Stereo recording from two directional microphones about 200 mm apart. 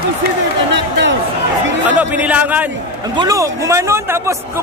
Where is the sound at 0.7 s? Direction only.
65° right (ahead or behind).